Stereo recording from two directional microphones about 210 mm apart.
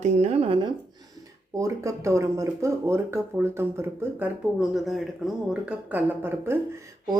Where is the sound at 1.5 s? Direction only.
15° right (ahead or behind).